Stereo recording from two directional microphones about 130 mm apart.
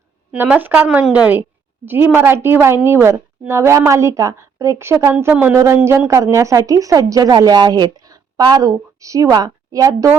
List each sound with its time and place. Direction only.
0.3 s a woman's voice: 10° right (ahead or behind); by 10.1 s 25° right (ahead or behind)